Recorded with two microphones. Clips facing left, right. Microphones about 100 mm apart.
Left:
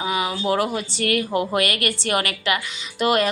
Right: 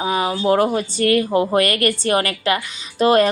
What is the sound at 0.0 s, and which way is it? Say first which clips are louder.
Speech: right 4 dB; 35° right (ahead or behind).